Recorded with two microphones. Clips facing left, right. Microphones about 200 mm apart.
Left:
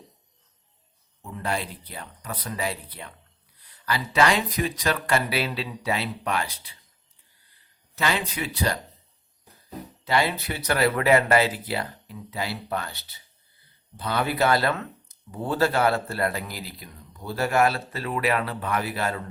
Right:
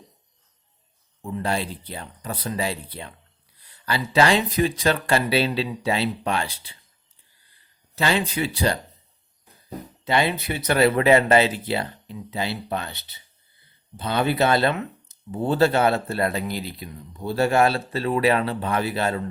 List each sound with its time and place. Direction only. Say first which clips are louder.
1.2 s speech: right 4 dB; 30° right (ahead or behind)
7.9 s speech: right 4 dB; 30° right (ahead or behind)
10.0 s speech: right 2 dB; 20° right (ahead or behind)